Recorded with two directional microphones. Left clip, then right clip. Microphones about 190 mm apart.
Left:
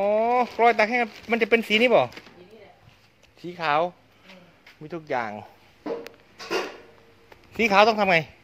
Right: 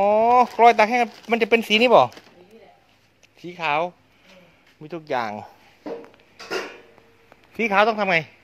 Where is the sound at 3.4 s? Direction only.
15° right (ahead or behind); by 5.5 s 35° right (ahead or behind).